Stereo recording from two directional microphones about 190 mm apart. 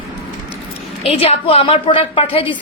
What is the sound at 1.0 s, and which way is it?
A woman's voice, 30° left (ahead or behind).